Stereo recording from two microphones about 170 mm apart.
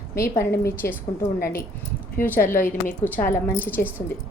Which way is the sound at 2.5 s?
55° left (ahead or behind).